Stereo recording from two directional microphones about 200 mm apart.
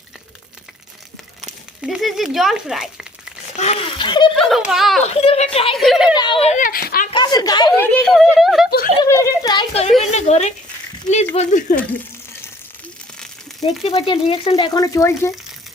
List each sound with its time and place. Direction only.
1.8 s speech: 5° right (ahead or behind)
3.6 s speech: 30° left (ahead or behind)
4.4 s speech: centre (ahead or behind)
5.0 s speech: 30° left (ahead or behind)
5.7 s speech: centre (ahead or behind)
6.1 s a child's voice: 25° left (ahead or behind); by 7.1 s 50° left (ahead or behind)
7.1 s speech: 20° left (ahead or behind)
7.8 s speech: 5° left (ahead or behind)
9.0 s a child's voice: 15° left (ahead or behind); by 11.8 s 40° left (ahead or behind)
13.8 s speech: 30° left (ahead or behind)